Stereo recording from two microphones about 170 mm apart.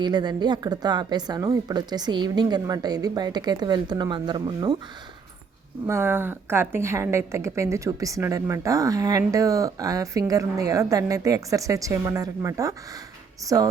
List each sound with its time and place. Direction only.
0.0 s a woman's voice: 25° right (ahead or behind)
5.8 s a woman's voice: 15° right (ahead or behind)